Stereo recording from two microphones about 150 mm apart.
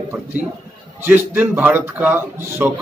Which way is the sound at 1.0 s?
10° right (ahead or behind).